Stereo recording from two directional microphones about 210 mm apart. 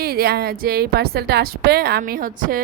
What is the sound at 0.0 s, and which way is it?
A woman's voice, 45° right (ahead or behind).